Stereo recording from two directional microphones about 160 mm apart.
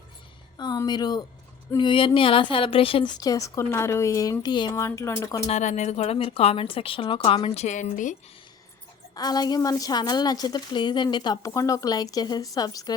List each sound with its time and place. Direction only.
0.5 s a sound: 25° left (ahead or behind)
0.9 s a woman's voice: 25° left (ahead or behind)
5.5 s speech: 45° left (ahead or behind)
9.1 s a woman's voice: 25° left (ahead or behind)